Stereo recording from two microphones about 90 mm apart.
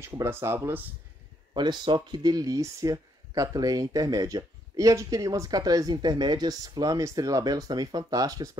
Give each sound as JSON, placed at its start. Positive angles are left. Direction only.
{"t": 0.0, "sound": "speech", "side_deg": -30}
{"t": 1.5, "sound": "speech", "side_deg": -55}